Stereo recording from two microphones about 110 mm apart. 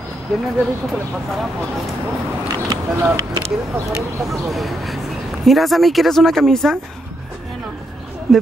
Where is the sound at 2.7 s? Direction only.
35° right (ahead or behind).